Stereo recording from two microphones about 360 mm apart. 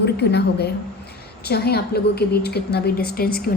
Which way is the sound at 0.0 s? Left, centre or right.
Left.